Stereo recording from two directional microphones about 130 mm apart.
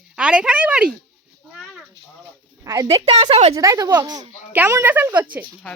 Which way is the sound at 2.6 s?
25° right (ahead or behind).